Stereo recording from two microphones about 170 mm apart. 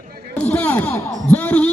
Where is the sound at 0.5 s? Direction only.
10° left (ahead or behind).